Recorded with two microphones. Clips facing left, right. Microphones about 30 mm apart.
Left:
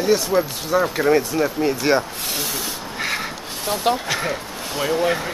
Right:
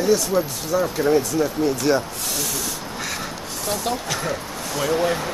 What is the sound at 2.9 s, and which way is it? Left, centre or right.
Crow, left.